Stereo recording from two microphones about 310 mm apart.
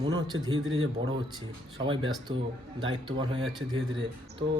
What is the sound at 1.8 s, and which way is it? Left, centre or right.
Speech, centre.